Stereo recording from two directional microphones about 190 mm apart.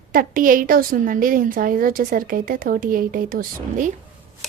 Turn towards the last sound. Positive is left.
turn(degrees=-45)  # may be behind; listen again after turning